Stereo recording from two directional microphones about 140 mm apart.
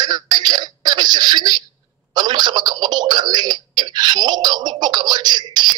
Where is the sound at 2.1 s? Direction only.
30° right (ahead or behind).